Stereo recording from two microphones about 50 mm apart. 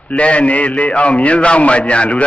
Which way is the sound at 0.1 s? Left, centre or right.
Left.